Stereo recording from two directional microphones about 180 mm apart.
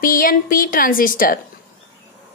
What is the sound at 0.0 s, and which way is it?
A woman's voice, 50° left (ahead or behind).